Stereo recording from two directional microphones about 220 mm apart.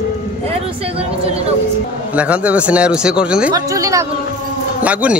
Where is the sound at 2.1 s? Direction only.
5° right (ahead or behind).